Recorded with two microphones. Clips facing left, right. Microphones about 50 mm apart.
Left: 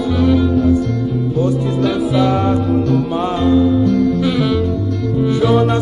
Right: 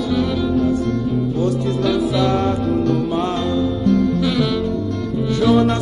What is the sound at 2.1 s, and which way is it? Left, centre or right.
Music, centre.